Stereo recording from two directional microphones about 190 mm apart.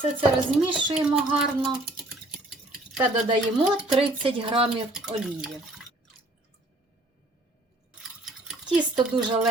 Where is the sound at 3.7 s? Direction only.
5° right (ahead or behind).